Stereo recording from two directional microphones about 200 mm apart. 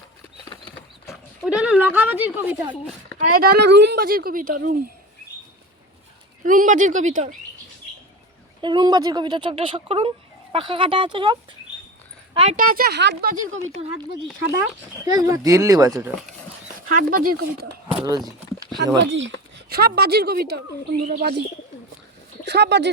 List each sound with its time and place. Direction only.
0.5 s a sound: 25° left (ahead or behind)
1.0 s a sound: centre (ahead or behind)
3.2 s speech: 45° right (ahead or behind)
6.4 s speech: 40° right (ahead or behind)
8.6 s speech: 20° right (ahead or behind)
12.5 s speech: 45° right (ahead or behind)
13.5 s speech: 35° right (ahead or behind)
15.1 s speech: 15° right (ahead or behind)
16.9 s speech: 45° right (ahead or behind)
17.9 s speech: 20° right (ahead or behind)
19.1 s speech: 65° right (ahead or behind)
22.4 s speech: 55° right (ahead or behind)